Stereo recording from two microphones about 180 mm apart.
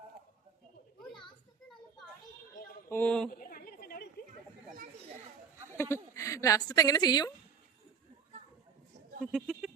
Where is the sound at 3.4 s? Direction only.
50° left (ahead or behind).